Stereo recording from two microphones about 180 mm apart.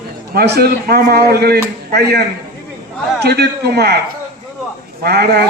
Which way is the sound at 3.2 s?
65° right (ahead or behind).